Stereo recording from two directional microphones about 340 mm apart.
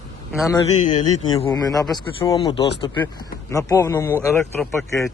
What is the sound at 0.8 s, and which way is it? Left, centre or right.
A man's voice, centre.